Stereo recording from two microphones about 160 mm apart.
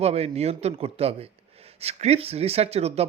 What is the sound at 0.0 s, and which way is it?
A man's voice, 40° right (ahead or behind).